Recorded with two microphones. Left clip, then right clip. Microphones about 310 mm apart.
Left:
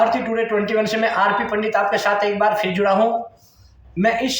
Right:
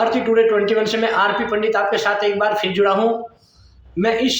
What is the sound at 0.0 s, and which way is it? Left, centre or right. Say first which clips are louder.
Speech: right 3 dB; centre.